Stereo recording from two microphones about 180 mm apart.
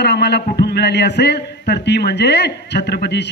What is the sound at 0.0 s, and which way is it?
A man's voice, 70° left (ahead or behind).